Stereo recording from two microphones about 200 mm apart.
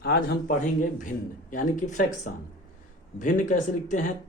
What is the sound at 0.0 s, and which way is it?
Speech, 50° left (ahead or behind).